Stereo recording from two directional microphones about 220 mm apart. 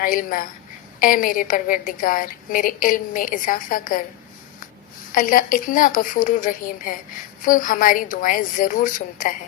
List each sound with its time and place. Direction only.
0.0 s a woman's voice: 40° left (ahead or behind)
5.1 s a woman's voice: 40° left (ahead or behind)